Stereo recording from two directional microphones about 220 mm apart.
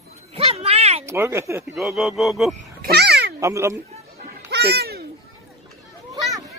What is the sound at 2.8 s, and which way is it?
Babbling, 45° right (ahead or behind).